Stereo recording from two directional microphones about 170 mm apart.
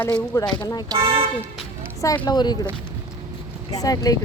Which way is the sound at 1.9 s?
20° left (ahead or behind).